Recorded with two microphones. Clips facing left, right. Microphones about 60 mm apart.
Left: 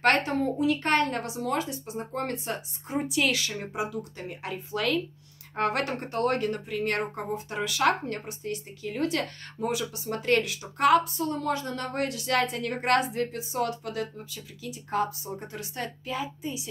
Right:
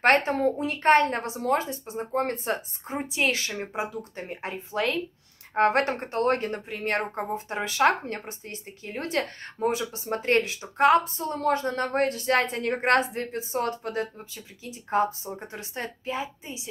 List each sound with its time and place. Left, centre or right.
0.0 s speech: right